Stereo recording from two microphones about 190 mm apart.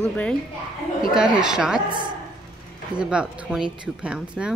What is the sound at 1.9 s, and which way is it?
Speech, 25° right (ahead or behind).